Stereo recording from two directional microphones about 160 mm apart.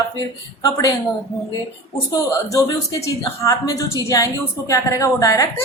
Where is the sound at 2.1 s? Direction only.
20° left (ahead or behind).